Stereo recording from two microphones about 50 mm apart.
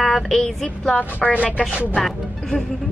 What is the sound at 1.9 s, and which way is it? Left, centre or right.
Child singing, centre.